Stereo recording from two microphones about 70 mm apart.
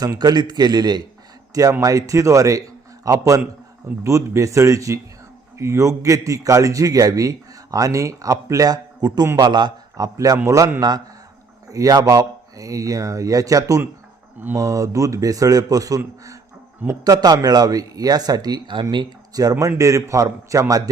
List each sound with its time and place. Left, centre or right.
0.2 s a man's voice: right
1.8 s a man's voice: right
9.4 s a man's voice: right
10.3 s a man's voice: right
10.8 s a man's voice: right
11.7 s a man's voice: right
17.0 s speech: right